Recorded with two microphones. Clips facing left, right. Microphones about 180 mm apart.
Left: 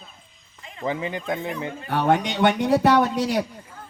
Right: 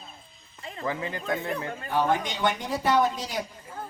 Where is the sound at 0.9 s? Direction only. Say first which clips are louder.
Left 3 dB; 20° left (ahead or behind).